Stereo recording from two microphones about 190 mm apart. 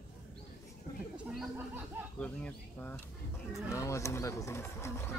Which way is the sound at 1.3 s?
Centre (ahead or behind).